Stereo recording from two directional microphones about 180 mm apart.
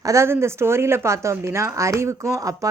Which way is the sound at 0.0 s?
15° right (ahead or behind).